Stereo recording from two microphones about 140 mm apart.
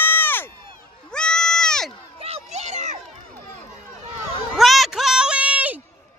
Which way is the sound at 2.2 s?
50° right (ahead or behind).